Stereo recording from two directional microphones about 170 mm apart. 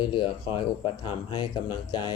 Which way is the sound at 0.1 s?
25° left (ahead or behind).